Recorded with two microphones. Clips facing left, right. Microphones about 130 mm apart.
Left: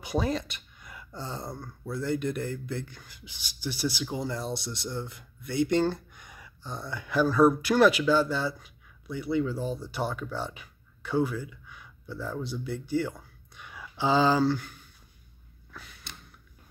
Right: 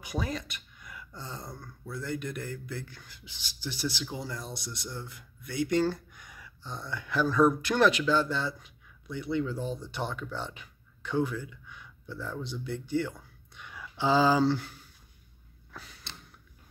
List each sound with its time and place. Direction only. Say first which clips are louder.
0.0 s speech: left 6 dB; 30° left (ahead or behind)
2.9 s speech: left 1 dB; 15° left (ahead or behind)
6.6 s speech: left 2 dB; 10° left (ahead or behind); by 14.4 s 5° right (ahead or behind)
14.4 s speech: even; 30° right (ahead or behind)
15.7 s a sound: even; 35° right (ahead or behind)